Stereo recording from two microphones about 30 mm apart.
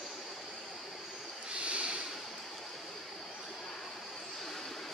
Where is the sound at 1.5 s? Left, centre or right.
Right.